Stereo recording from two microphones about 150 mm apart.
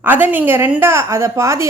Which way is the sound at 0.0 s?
10° right (ahead or behind).